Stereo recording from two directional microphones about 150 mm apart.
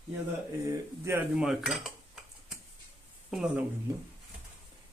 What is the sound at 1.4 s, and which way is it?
Cutlery, 5° right (ahead or behind).